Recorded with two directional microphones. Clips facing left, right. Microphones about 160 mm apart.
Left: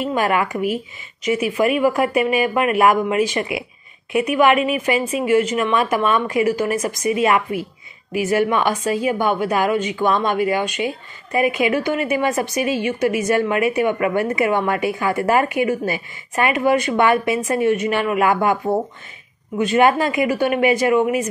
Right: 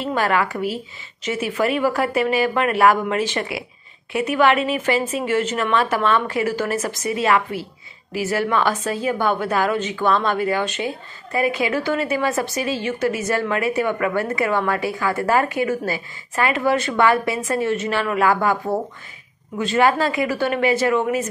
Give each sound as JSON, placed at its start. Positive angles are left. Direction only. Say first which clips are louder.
{"t": 0.0, "sound": "a woman's voice", "louder": "left 1 dB", "side_deg": 15}